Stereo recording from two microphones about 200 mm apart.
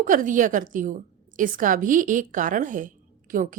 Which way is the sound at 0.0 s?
40° right (ahead or behind).